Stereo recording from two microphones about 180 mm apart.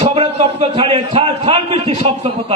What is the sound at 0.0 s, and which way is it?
Speech, 35° right (ahead or behind).